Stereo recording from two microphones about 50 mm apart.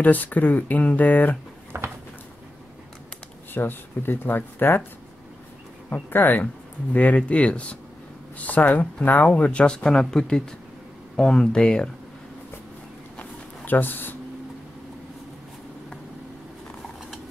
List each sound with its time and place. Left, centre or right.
0.0 s speech: left
1.7 s a sound: right
3.5 s speech: left
6.0 s speech: left
9.3 s speech: left
9.8 s speech: centre
13.2 s a sound: left